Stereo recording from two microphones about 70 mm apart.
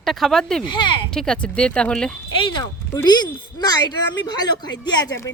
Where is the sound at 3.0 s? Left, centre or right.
Left.